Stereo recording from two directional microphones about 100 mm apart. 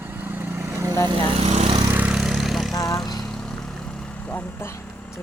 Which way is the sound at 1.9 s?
15° right (ahead or behind).